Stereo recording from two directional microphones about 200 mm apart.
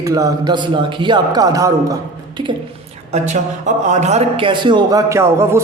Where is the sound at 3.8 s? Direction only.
35° right (ahead or behind); by 5.6 s 15° right (ahead or behind).